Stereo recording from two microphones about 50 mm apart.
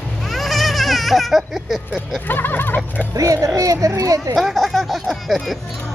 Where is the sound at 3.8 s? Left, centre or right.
Right.